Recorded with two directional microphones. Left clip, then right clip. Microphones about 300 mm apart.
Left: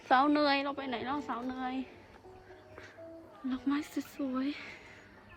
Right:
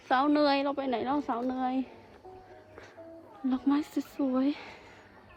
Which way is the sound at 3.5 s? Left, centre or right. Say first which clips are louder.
Right 5 dB; centre.